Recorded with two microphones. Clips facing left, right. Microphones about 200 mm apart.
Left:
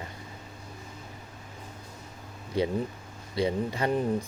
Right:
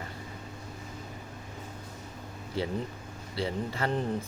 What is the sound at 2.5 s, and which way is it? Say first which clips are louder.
Speech: left 5 dB; 15° left (ahead or behind).